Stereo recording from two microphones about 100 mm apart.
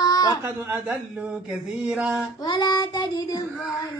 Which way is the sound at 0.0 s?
40° left (ahead or behind).